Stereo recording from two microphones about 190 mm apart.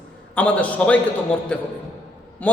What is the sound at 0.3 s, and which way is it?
Mantra, 5° left (ahead or behind).